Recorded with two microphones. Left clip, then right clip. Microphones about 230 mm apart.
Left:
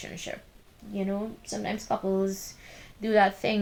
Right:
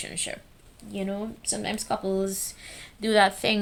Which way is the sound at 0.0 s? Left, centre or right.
Right.